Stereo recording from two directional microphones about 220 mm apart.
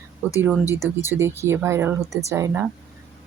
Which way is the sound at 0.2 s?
5° right (ahead or behind).